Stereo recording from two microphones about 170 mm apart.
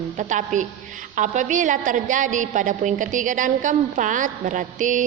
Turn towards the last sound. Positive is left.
turn(degrees=-50)  # may be behind; listen again after turning